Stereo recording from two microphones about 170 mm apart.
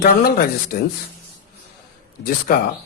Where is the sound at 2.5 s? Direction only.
60° left (ahead or behind).